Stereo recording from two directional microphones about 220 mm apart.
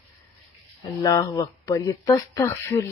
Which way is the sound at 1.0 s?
15° left (ahead or behind).